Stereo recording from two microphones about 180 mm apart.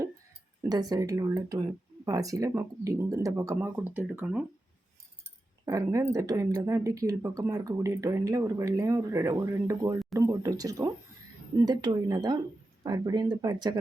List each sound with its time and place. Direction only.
0.7 s speech: 20° right (ahead or behind)
5.6 s speech: 15° right (ahead or behind)